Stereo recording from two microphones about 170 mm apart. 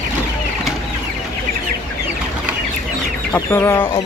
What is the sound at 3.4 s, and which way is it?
Speech, 15° left (ahead or behind).